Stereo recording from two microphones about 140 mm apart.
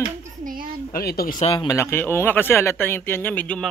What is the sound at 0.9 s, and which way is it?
Speech, 90° left.